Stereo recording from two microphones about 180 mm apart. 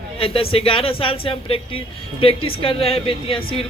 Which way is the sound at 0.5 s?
30° left (ahead or behind).